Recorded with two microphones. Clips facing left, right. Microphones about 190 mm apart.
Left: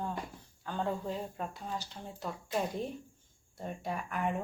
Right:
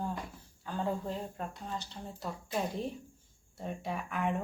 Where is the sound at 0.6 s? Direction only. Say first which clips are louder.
Even; centre (ahead or behind).